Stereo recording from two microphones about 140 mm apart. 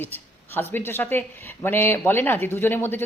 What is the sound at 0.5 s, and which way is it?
Speech, 15° left (ahead or behind).